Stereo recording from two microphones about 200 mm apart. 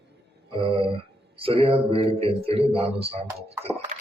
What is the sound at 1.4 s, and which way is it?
A man's voice, 25° right (ahead or behind).